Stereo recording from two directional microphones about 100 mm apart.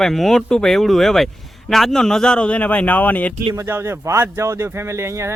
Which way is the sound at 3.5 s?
25° right (ahead or behind).